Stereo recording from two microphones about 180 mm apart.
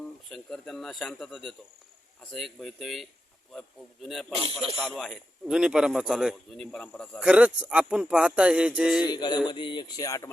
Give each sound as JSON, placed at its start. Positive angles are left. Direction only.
{"t": 0.3, "sound": "a man's voice", "side_deg": 0}
{"t": 4.4, "sound": "speech", "side_deg": -30}
{"t": 4.8, "sound": "a man's voice", "side_deg": 0}
{"t": 9.0, "sound": "speech", "side_deg": 25}